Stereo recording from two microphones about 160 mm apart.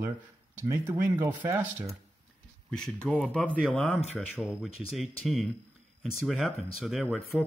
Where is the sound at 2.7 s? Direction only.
5° left (ahead or behind).